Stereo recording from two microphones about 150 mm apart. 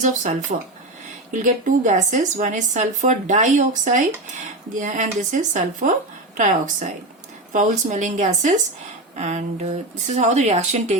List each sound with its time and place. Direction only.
0.0 s a woman's voice: 55° right (ahead or behind)